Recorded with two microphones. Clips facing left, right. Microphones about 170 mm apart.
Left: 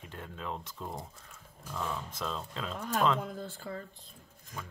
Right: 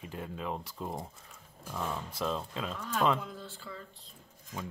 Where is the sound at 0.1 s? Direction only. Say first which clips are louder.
Right 3 dB; 5° right (ahead or behind).